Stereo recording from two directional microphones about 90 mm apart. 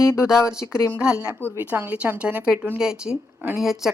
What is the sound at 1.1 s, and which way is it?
A woman's voice, 30° right (ahead or behind).